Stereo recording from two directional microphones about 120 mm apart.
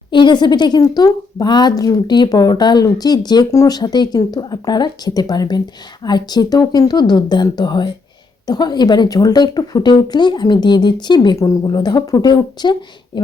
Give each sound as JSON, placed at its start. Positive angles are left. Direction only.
{"t": 0.1, "sound": "speech", "side_deg": 40}